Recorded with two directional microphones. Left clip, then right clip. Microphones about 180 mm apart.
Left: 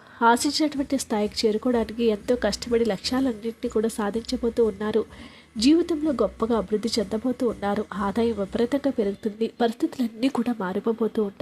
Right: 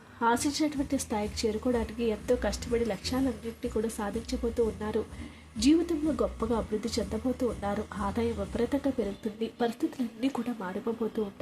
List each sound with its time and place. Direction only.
0.2 s speech: 40° left (ahead or behind)